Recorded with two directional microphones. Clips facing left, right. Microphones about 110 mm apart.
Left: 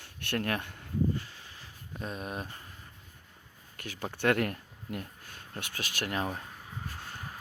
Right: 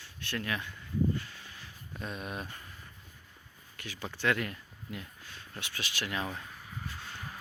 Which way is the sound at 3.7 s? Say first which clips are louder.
Left 3 dB; 45° left (ahead or behind).